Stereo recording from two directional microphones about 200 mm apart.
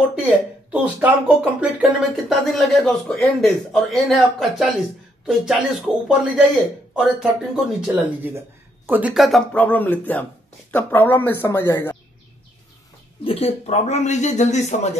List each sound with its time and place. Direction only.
0.7 s speech: 10° right (ahead or behind); by 12.0 s 10° left (ahead or behind)
13.2 s speech: 30° left (ahead or behind)